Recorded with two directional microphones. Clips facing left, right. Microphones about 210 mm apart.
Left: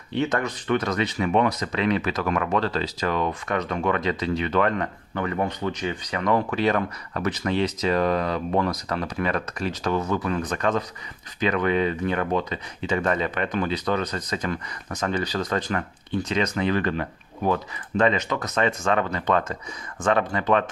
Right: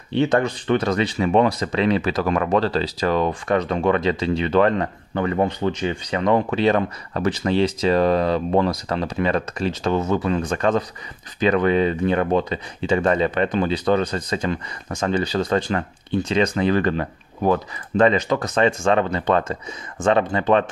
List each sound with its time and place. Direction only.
0.1 s speech: 30° right (ahead or behind)